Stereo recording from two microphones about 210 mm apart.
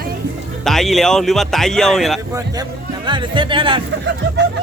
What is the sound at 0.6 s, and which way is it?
Speech, centre (ahead or behind).